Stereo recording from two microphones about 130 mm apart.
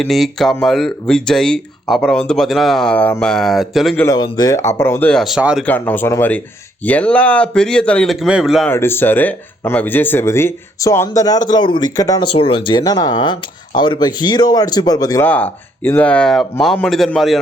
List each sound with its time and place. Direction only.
0.0 s speech: centre (ahead or behind)
4.0 s speech: 30° left (ahead or behind)
5.1 s speech: centre (ahead or behind)
5.6 s speech: 15° left (ahead or behind); by 8.6 s 5° right (ahead or behind)
8.6 s speech: 20° left (ahead or behind)
12.3 s speech: 45° left (ahead or behind); by 15.2 s 30° left (ahead or behind)
15.2 s speech: 15° left (ahead or behind)